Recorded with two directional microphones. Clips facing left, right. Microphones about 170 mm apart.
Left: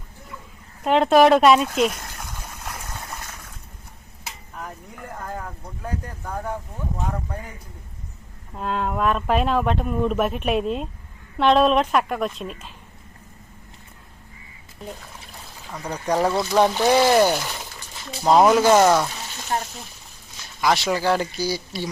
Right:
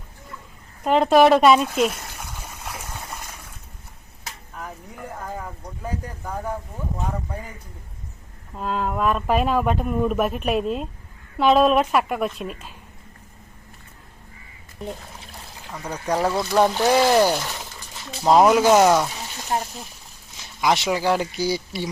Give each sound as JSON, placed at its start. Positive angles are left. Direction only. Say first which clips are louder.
{"t": 0.9, "sound": "a sound", "louder": "even", "side_deg": 0}
{"t": 4.2, "sound": "speech", "louder": "even", "side_deg": 0}
{"t": 8.5, "sound": "speech", "louder": "even", "side_deg": 0}
{"t": 15.8, "sound": "speech", "louder": "left 1 dB", "side_deg": 10}
{"t": 20.6, "sound": "speech", "louder": "even", "side_deg": -15}
{"t": 21.3, "sound": "speech", "louder": "right 2 dB", "side_deg": -20}